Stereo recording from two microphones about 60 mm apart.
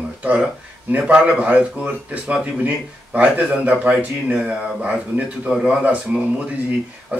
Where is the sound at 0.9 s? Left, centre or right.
Right.